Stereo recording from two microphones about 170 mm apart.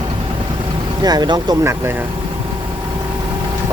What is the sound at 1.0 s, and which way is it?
Speech, 25° right (ahead or behind).